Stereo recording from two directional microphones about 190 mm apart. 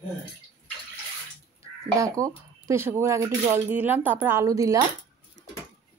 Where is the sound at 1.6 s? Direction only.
15° right (ahead or behind).